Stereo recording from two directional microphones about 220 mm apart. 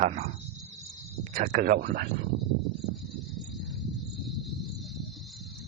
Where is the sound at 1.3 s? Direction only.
35° right (ahead or behind).